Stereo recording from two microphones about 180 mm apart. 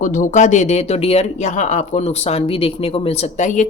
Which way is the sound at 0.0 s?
45° left (ahead or behind).